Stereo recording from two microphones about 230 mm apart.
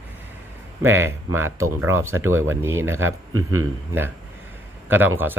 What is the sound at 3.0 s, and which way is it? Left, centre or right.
Speech, right.